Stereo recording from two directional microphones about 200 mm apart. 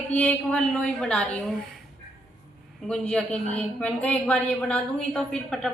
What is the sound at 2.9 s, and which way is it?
A woman's voice, 5° left (ahead or behind).